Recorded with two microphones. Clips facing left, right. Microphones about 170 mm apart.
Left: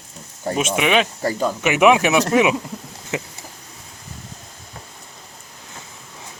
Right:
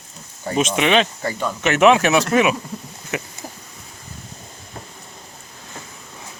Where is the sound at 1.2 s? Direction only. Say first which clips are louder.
Left 3 dB; 35° left (ahead or behind).